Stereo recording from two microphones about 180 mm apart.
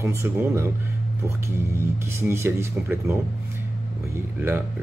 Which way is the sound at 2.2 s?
15° right (ahead or behind).